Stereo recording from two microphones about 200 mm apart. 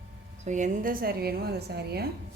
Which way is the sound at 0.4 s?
40° right (ahead or behind).